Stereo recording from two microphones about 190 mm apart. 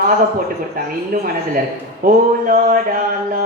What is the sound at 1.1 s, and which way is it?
Speech, 50° right (ahead or behind).